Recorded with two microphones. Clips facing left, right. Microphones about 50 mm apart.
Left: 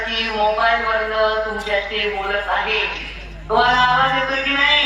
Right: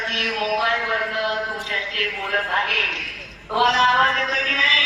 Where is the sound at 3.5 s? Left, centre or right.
Centre.